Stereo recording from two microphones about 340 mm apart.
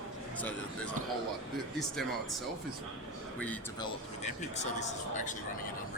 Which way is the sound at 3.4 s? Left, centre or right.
Centre.